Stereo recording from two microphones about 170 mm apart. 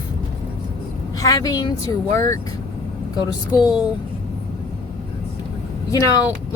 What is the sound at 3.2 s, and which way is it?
Speech, 25° left (ahead or behind).